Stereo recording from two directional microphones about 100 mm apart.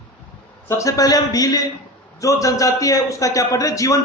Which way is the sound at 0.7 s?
30° left (ahead or behind).